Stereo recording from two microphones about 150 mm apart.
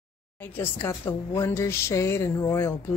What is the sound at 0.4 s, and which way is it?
A woman's voice, 15° left (ahead or behind).